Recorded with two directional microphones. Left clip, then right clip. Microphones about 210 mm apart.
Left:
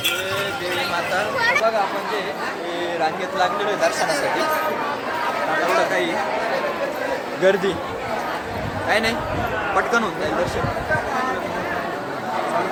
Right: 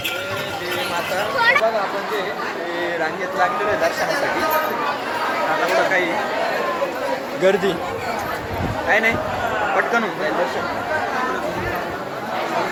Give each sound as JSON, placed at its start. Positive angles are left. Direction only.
{"t": 1.4, "sound": "speech", "side_deg": 45}
{"t": 7.4, "sound": "speech", "side_deg": 0}
{"t": 8.9, "sound": "speech", "side_deg": 15}